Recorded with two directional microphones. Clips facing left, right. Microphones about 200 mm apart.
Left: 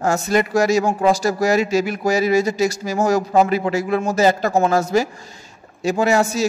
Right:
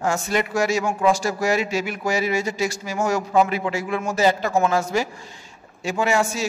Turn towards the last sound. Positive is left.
turn(degrees=40)  # may be behind; listen again after turning